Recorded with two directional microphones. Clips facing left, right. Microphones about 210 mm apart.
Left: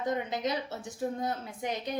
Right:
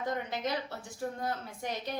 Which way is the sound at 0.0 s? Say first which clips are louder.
Left 3 dB; 20° left (ahead or behind).